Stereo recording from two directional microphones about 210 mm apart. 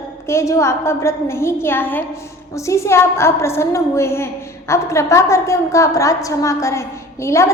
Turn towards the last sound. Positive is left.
turn(degrees=15)  # may be behind; listen again after turning